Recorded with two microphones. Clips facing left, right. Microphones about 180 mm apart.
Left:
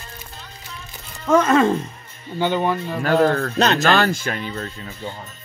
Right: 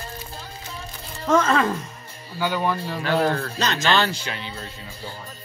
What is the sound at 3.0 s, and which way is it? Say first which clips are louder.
Speech: left 5 dB; 50° left (ahead or behind).